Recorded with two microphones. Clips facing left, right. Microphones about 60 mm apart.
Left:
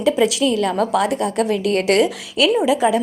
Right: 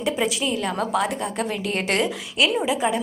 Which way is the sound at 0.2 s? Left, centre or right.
Left.